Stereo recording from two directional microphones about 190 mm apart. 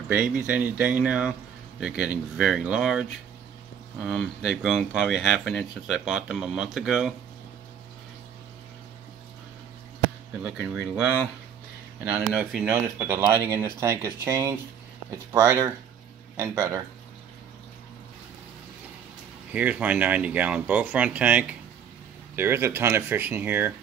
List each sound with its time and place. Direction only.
0.1 s speech: 10° right (ahead or behind)
10.4 s speech: 5° right (ahead or behind)
19.5 s speech: 5° right (ahead or behind)